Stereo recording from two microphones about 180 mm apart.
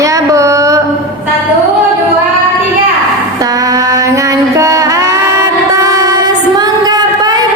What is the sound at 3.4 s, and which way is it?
Music, 20° right (ahead or behind).